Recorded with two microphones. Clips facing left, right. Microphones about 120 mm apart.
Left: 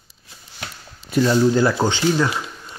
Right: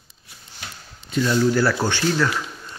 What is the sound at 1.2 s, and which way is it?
A man's voice, 25° left (ahead or behind).